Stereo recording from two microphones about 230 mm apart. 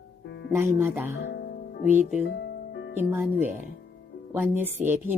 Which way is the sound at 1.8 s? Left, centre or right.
Centre.